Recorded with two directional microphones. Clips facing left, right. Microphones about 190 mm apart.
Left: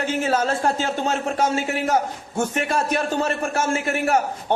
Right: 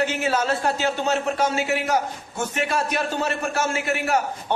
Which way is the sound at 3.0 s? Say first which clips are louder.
Left 2 dB; 50° left (ahead or behind).